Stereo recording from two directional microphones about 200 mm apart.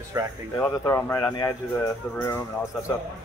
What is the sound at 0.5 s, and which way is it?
Speech, 10° left (ahead or behind).